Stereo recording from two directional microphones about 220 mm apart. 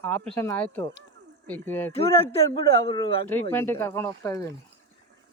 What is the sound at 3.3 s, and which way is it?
Speech, 10° left (ahead or behind).